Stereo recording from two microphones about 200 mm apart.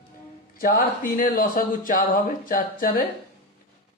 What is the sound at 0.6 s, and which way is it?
Speech, 45° left (ahead or behind).